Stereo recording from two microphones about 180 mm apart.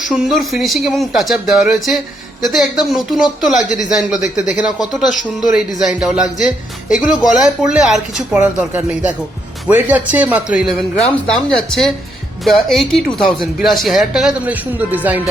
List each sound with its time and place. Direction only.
0.1 s speech: centre (ahead or behind)